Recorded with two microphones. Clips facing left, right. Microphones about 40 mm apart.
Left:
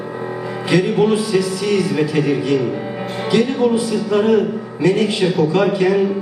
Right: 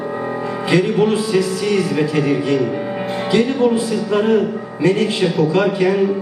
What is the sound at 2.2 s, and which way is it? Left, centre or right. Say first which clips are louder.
Speech: even; centre.